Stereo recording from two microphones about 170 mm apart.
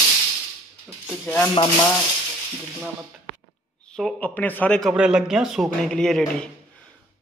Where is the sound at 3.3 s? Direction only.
65° right (ahead or behind).